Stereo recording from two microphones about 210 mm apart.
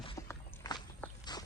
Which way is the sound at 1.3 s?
20° left (ahead or behind).